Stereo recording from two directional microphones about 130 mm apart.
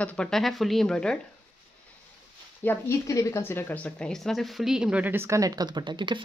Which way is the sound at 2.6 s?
15° left (ahead or behind).